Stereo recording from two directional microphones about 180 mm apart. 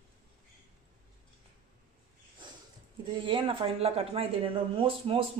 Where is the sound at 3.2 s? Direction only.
30° right (ahead or behind).